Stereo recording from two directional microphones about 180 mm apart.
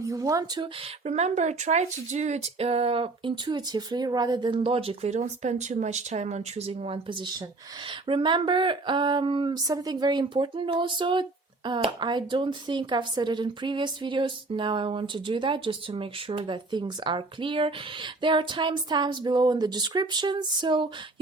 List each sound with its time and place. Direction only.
0.0 s speech: 20° right (ahead or behind)
1.0 s speech: 40° right (ahead or behind)